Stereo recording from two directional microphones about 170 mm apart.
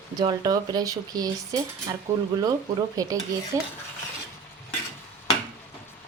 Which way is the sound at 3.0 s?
20° right (ahead or behind).